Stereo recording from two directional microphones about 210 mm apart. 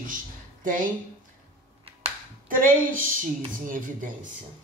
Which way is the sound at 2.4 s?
40° right (ahead or behind).